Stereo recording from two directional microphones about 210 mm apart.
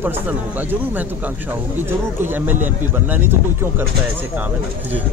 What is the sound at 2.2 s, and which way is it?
Speech, 10° right (ahead or behind).